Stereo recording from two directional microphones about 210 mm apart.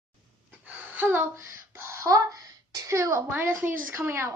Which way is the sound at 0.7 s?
10° right (ahead or behind).